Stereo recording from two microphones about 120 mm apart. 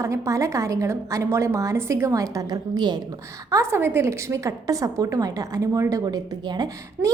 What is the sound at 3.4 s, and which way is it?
A woman's voice, 25° right (ahead or behind).